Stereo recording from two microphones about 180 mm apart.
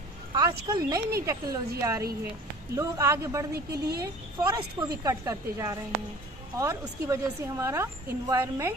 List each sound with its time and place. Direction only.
0.3 s a woman's voice: 20° right (ahead or behind)
3.5 s a woman's voice: 60° right (ahead or behind)
4.4 s a woman's voice: 20° right (ahead or behind)